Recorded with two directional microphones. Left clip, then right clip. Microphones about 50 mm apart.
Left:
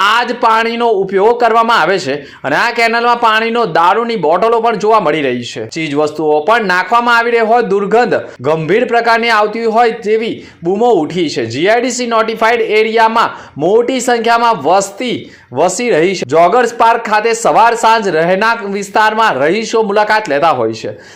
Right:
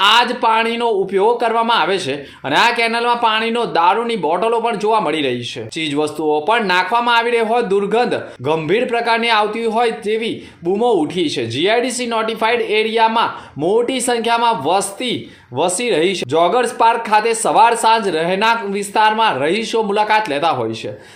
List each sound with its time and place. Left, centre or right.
0.0 s a man's voice: left
1.7 s a man's voice: left
8.5 s a man's voice: left
9.0 s a man's voice: left
10.7 s speech: left
11.2 s a man's voice: left
16.8 s a man's voice: left
19.4 s a man's voice: left
20.1 s a man's voice: left